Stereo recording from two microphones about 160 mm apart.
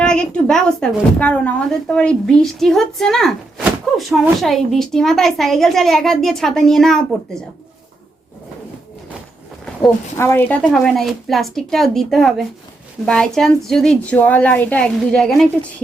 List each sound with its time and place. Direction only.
0.0 s a woman's voice: 5° left (ahead or behind)
10.2 s a woman's voice: 15° left (ahead or behind)